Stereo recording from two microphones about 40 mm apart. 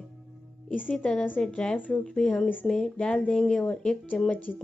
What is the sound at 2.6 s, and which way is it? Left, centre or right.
Speech, centre.